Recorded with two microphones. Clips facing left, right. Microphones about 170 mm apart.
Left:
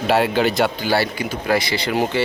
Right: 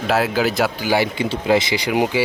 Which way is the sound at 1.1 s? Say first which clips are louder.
Right 3 dB; 25° right (ahead or behind).